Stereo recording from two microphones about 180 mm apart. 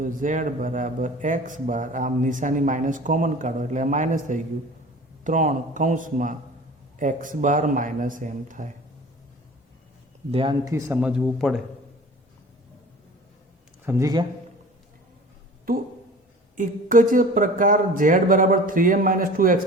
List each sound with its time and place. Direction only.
0.0 s a man's voice: 45° right (ahead or behind)
10.3 s speech: 25° right (ahead or behind)
11.0 s speech: 5° right (ahead or behind)
13.8 s speech: 20° right (ahead or behind)
15.7 s a man's voice: 55° right (ahead or behind)